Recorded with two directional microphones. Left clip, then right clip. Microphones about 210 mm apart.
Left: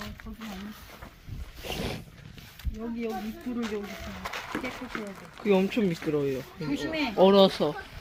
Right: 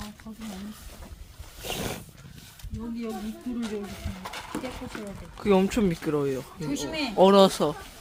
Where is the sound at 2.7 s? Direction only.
Centre (ahead or behind).